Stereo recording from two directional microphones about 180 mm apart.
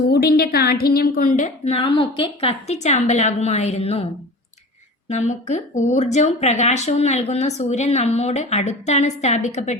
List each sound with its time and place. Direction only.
0.1 s speech: 60° left (ahead or behind); by 9.7 s 40° left (ahead or behind)